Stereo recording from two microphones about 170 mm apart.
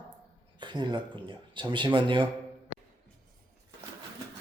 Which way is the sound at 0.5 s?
25° right (ahead or behind).